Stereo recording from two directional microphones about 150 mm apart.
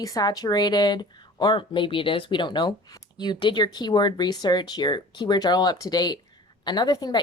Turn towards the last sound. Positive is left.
turn(degrees=25)  # may be behind; listen again after turning